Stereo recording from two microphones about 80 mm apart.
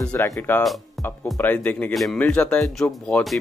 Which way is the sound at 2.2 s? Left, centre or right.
Centre.